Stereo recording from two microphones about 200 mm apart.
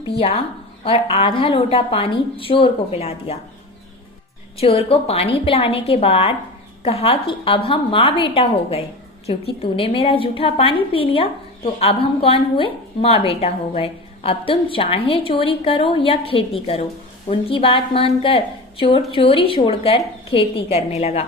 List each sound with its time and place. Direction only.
0.0 s a woman's voice: 30° left (ahead or behind)
4.5 s a woman's voice: 30° left (ahead or behind)